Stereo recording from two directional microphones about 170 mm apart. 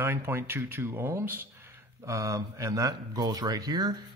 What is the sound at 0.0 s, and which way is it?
Speech, 15° right (ahead or behind).